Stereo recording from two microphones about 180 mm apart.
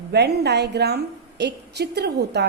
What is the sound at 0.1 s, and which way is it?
A woman's voice, 65° right (ahead or behind).